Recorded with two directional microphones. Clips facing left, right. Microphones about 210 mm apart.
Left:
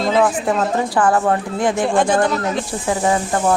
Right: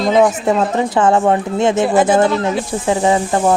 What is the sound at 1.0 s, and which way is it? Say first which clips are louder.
Speech: right 4 dB; 20° right (ahead or behind).